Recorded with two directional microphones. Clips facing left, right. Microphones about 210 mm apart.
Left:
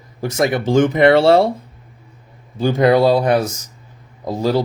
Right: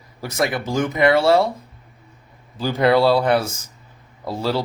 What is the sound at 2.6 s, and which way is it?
Speech, 20° left (ahead or behind).